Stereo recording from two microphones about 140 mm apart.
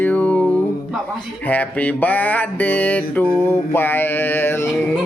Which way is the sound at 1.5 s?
10° left (ahead or behind).